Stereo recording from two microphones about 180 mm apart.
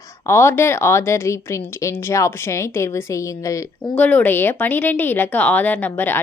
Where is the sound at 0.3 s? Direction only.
15° left (ahead or behind).